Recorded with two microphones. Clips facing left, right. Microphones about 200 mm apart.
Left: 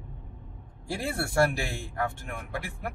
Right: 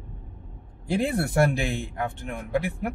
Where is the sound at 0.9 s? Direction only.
20° right (ahead or behind).